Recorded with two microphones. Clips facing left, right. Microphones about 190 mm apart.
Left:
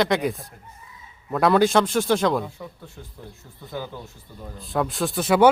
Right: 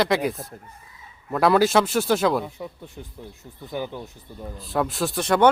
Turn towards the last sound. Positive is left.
turn(degrees=5)  # may be behind; listen again after turning